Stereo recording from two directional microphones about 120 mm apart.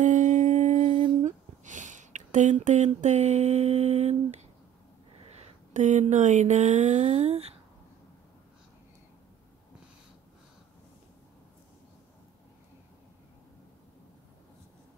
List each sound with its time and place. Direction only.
0.0 s humming: 90° right
1.2 s speech: 90° right; by 4.5 s 65° right (ahead or behind)
5.3 s speech: 90° right; by 7.5 s 60° right (ahead or behind)